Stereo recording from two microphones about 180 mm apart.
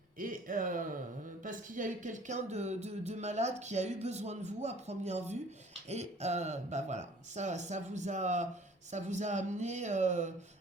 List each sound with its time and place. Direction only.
0.2 s speech: 50° right (ahead or behind)